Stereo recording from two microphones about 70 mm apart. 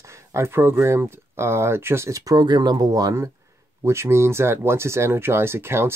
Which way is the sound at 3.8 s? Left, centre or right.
Right.